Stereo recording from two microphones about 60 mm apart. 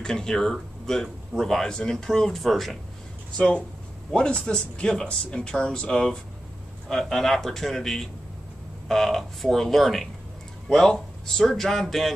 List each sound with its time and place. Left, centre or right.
0.0 s a man's voice: centre
3.3 s a man's voice: centre